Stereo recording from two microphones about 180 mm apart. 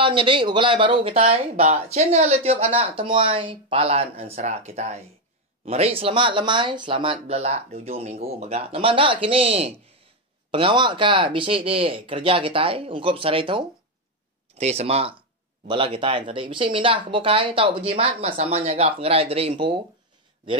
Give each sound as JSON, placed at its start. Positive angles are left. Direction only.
{"t": 0.0, "sound": "speech", "side_deg": -25}